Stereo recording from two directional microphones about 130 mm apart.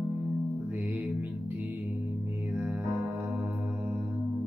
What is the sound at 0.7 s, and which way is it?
Music, 10° right (ahead or behind).